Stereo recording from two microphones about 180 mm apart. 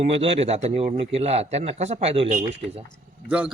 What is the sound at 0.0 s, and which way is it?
Speech, 35° right (ahead or behind).